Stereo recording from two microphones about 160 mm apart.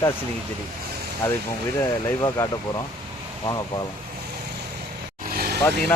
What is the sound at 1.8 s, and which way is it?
Speech, 20° left (ahead or behind).